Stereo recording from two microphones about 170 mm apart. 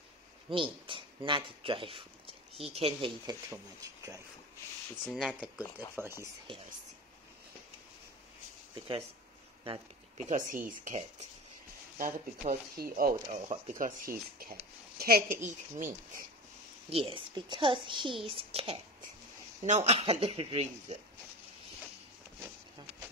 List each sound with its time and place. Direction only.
0.5 s speech: 30° right (ahead or behind)
3.3 s a woman's voice: 20° right (ahead or behind)
5.0 s speech: centre (ahead or behind)
5.9 s speech: 15° right (ahead or behind)
9.7 s speech: 45° right (ahead or behind)
12.0 s a woman's voice: 55° right (ahead or behind)
15.4 s speech: 50° right (ahead or behind)
16.9 s a woman's voice: 30° right (ahead or behind)